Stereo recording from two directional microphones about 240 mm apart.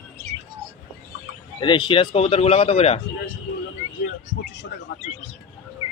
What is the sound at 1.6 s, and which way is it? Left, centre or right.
Speech, left.